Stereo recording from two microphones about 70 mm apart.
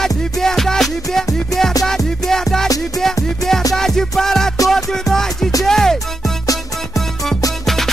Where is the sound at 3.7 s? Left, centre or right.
Centre.